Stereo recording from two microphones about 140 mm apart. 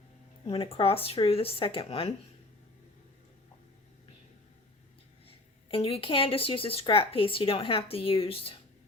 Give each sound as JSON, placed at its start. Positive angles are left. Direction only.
{"t": 0.4, "sound": "speech", "side_deg": 40}
{"t": 5.7, "sound": "speech", "side_deg": 40}